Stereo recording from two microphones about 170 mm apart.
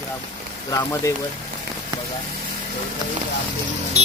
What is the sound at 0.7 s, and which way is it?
Speech, 20° left (ahead or behind).